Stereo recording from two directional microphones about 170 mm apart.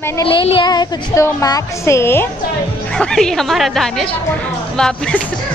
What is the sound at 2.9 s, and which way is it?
Speech, 5° left (ahead or behind).